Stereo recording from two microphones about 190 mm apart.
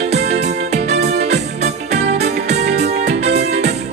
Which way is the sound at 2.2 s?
35° right (ahead or behind).